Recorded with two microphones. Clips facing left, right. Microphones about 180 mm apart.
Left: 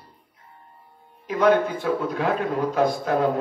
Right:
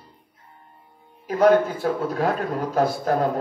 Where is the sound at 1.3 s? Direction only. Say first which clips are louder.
Right 2 dB; 40° right (ahead or behind).